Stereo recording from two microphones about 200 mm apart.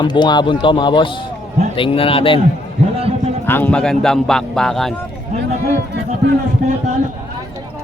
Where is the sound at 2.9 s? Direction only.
30° right (ahead or behind).